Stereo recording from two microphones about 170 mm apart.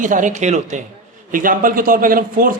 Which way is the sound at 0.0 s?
50° right (ahead or behind).